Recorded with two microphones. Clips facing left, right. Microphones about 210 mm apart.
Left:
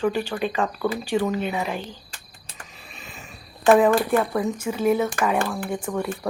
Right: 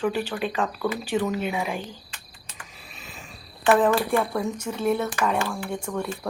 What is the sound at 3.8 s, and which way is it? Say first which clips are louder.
A woman's voice: left 3 dB; 5° left (ahead or behind).